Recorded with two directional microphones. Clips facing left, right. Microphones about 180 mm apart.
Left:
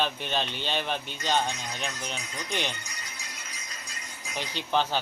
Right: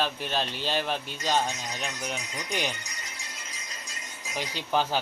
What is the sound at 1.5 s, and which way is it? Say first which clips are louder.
A man's voice: even; 20° right (ahead or behind).